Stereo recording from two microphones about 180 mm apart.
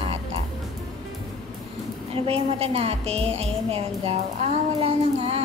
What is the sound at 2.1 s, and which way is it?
A child's voice, 35° right (ahead or behind).